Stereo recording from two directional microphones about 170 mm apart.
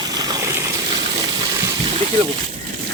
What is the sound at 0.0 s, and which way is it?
Vehicle, 25° right (ahead or behind).